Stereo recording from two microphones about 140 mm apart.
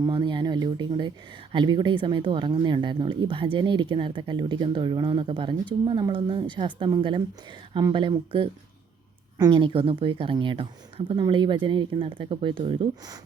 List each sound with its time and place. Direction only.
0.0 s speech: 30° right (ahead or behind)